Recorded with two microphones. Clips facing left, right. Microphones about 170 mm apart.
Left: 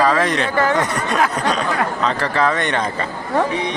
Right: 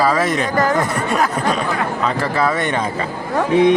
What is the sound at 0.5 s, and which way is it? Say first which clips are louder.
Speech: right 1 dB; 40° right (ahead or behind).